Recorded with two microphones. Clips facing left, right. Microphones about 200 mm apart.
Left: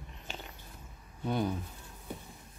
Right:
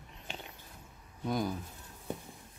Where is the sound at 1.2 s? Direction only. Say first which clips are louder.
Left 1 dB; 10° right (ahead or behind).